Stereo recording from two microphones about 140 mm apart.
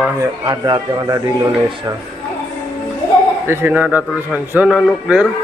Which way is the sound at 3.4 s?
15° right (ahead or behind).